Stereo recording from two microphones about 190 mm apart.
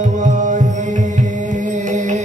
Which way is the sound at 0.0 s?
40° right (ahead or behind).